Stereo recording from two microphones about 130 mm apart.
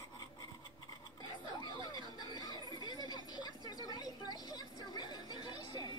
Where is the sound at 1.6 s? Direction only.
30° left (ahead or behind).